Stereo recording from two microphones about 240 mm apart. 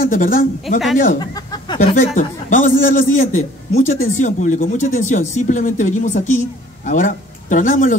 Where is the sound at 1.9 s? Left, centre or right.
Left.